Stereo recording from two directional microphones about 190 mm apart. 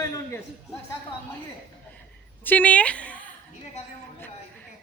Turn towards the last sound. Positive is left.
turn(degrees=5)  # may be behind; listen again after turning